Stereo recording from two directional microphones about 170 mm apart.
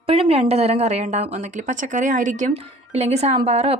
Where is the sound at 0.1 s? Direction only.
35° right (ahead or behind).